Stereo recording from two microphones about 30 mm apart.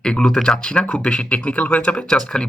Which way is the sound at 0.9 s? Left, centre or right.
Left.